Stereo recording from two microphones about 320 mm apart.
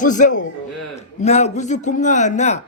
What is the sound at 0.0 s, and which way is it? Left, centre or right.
A man's voice, left.